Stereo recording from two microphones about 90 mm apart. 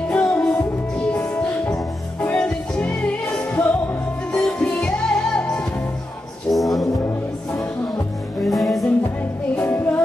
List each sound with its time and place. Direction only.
0.1 s music: 10° left (ahead or behind)
8.5 s music: centre (ahead or behind)
9.6 s music: 20° left (ahead or behind)